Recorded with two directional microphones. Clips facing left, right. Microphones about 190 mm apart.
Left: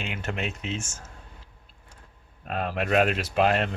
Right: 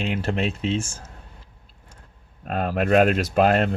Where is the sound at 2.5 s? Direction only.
45° right (ahead or behind).